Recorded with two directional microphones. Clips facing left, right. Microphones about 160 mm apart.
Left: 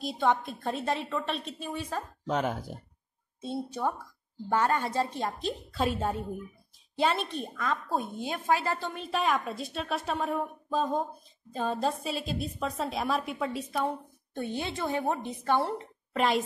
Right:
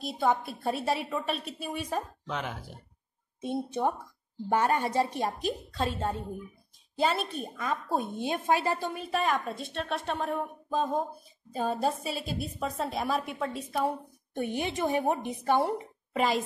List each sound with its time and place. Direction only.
0.0 s a woman's voice: centre (ahead or behind)
2.2 s speech: 45° left (ahead or behind)
3.3 s a woman's voice: 20° right (ahead or behind)
5.7 s a woman's voice: 10° left (ahead or behind)
7.0 s a woman's voice: centre (ahead or behind)
8.9 s a woman's voice: centre (ahead or behind)
14.3 s a woman's voice: 15° right (ahead or behind)
16.2 s a woman's voice: centre (ahead or behind)